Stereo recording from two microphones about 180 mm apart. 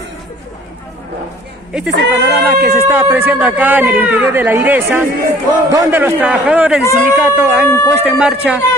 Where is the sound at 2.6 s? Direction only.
10° right (ahead or behind).